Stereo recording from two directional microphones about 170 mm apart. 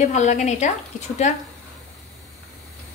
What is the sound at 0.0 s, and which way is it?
A woman's voice, 45° left (ahead or behind).